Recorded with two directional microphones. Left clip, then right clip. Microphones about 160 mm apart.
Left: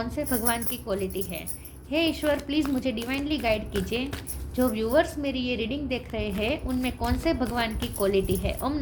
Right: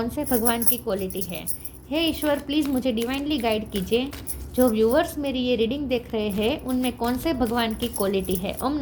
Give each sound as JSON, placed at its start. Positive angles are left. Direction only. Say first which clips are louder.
{"t": 0.0, "sound": "a woman's voice", "louder": "right 4 dB", "side_deg": -40}